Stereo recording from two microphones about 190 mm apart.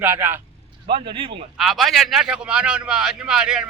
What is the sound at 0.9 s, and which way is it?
Speech, 25° right (ahead or behind).